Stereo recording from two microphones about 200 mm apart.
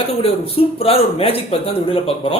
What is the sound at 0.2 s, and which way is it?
A man's voice, 30° left (ahead or behind).